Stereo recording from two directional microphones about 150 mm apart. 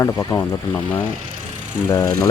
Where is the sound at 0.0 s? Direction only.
20° left (ahead or behind).